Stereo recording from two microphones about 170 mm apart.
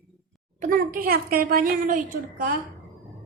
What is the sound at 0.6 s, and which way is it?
A woman's voice, 55° right (ahead or behind).